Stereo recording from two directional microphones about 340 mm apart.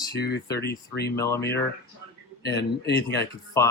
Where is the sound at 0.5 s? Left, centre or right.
Left.